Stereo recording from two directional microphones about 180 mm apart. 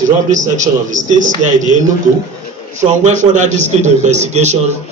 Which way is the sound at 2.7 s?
40° right (ahead or behind).